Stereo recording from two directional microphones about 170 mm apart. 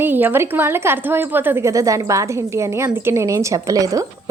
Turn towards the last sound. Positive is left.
turn(degrees=-20)  # may be behind; listen again after turning